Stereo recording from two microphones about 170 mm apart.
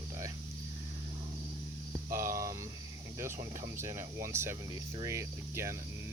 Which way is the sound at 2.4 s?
20° right (ahead or behind).